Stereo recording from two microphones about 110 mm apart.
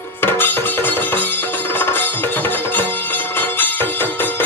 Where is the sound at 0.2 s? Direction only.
20° left (ahead or behind).